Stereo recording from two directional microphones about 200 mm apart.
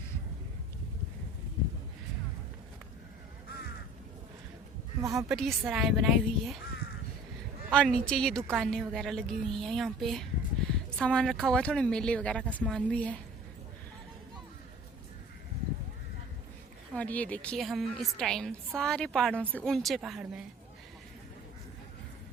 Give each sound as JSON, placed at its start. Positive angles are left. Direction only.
{"t": 4.9, "sound": "a woman's voice", "side_deg": -15}
{"t": 5.3, "sound": "speech", "side_deg": 0}
{"t": 7.7, "sound": "speech", "side_deg": 5}
{"t": 16.9, "sound": "speech", "side_deg": 5}